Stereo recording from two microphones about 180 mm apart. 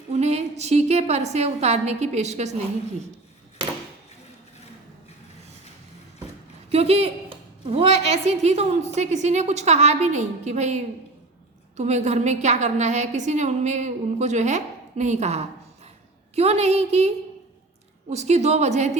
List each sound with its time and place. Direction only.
0.1 s a woman's voice: 35° right (ahead or behind)
6.7 s a woman's voice: 35° right (ahead or behind)
18.1 s a woman's voice: 35° right (ahead or behind)